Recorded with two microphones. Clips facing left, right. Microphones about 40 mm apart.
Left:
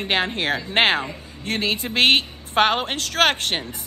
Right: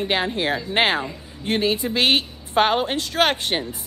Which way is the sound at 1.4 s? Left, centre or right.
Left.